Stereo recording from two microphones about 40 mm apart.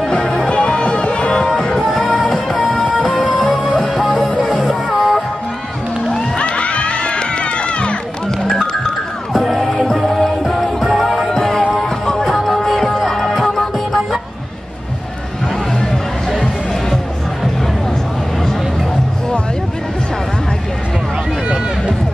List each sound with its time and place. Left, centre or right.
0.1 s music: centre
1.8 s music: centre
3.8 s music: centre
6.1 s crowd: left
9.3 s music: centre
11.2 s music: centre